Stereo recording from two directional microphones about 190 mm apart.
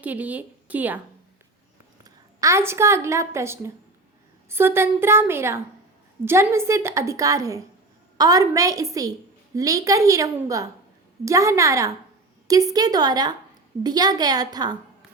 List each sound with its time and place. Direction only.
0.0 s a woman's voice: 10° right (ahead or behind)
2.0 s a woman's voice: 15° right (ahead or behind)